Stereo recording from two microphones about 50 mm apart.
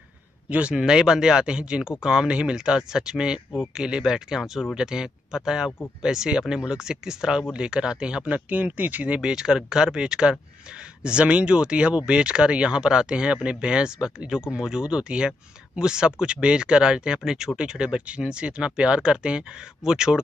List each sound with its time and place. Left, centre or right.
0.5 s speech: right
0.7 s speech: centre
4.4 s speech: centre
4.7 s speech: centre
8.3 s speech: right
9.3 s speech: centre